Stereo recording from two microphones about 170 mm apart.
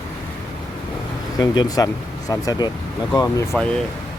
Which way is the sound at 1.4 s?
25° left (ahead or behind).